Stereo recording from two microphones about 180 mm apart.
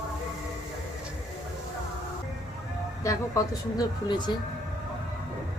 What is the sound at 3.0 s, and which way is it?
Speech, 15° left (ahead or behind).